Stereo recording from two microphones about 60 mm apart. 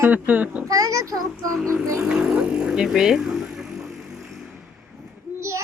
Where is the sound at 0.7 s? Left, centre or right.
Right.